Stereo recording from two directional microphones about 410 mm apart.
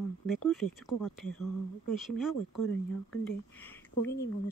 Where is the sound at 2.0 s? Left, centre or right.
Centre.